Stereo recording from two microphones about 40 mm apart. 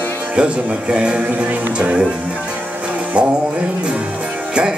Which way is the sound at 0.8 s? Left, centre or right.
Right.